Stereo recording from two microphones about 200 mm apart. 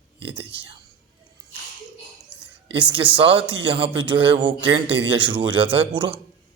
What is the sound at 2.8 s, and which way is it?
Speech, 25° right (ahead or behind).